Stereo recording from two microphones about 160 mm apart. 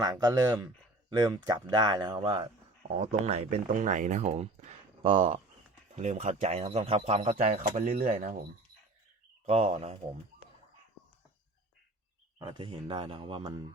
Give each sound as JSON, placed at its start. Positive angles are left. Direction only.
{"t": 0.0, "sound": "a man's voice", "side_deg": -25}
{"t": 3.7, "sound": "speech", "side_deg": -50}
{"t": 6.0, "sound": "speech", "side_deg": -45}
{"t": 9.5, "sound": "a man's voice", "side_deg": -40}
{"t": 12.4, "sound": "a man's voice", "side_deg": -30}